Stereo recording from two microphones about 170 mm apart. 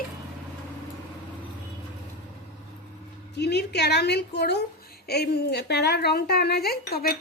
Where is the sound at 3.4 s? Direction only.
80° left.